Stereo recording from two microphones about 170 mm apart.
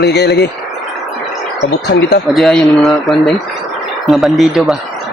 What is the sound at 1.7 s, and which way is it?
Speech, 70° left (ahead or behind).